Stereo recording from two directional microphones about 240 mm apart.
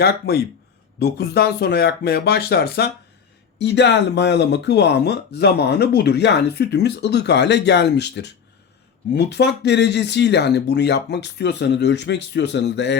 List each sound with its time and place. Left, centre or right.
0.0 s speech: left